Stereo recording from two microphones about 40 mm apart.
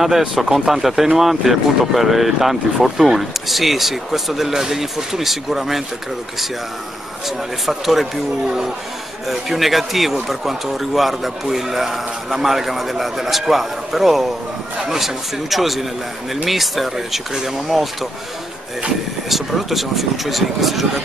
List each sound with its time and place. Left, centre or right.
0.4 s speech: centre
7.2 s speech: centre
8.5 s speech: centre
9.3 s speech: centre
19.2 s speech: centre